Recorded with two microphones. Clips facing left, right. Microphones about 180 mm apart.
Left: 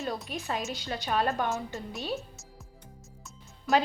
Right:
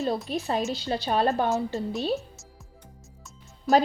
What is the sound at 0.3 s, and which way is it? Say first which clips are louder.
A woman's voice: right 6 dB; 35° right (ahead or behind).